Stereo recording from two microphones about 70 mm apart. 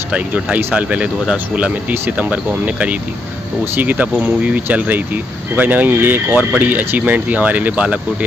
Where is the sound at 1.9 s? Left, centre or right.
Right.